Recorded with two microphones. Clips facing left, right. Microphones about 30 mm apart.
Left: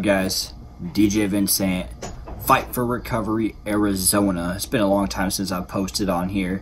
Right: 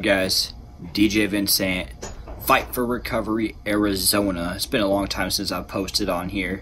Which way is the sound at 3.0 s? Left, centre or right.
Right.